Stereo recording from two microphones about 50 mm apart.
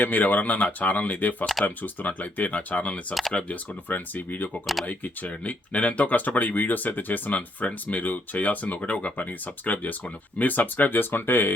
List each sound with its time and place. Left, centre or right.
0.0 s speech: left
4.6 s speech: centre
4.9 s speech: left